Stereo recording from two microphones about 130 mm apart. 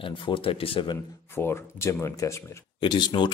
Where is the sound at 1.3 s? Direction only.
15° left (ahead or behind).